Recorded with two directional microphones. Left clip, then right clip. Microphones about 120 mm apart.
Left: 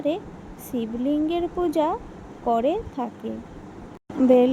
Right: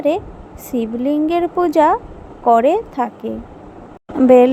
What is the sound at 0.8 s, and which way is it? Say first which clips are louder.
Speech: right 7 dB; 55° right (ahead or behind).